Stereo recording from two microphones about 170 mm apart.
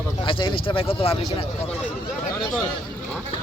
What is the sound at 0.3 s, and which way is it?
Speech, 30° left (ahead or behind).